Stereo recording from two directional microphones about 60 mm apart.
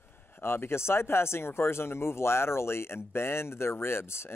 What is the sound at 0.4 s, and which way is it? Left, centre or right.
Speech, left.